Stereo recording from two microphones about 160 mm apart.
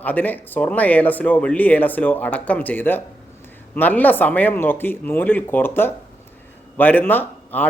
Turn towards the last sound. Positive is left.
turn(degrees=10)  # may be behind; listen again after turning